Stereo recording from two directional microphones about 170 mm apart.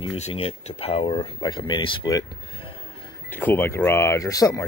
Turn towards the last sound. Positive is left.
turn(degrees=20)  # may be behind; listen again after turning